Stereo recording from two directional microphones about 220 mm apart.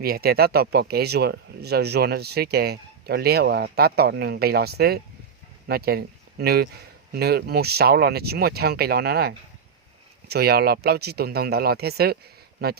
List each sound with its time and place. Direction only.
0.0 s speech: 45° right (ahead or behind)